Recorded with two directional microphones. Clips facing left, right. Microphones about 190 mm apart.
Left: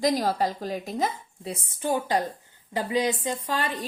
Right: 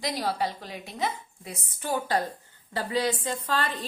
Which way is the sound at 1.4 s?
30° left (ahead or behind).